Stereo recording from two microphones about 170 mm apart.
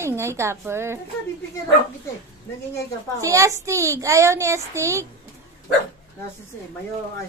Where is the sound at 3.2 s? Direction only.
20° right (ahead or behind).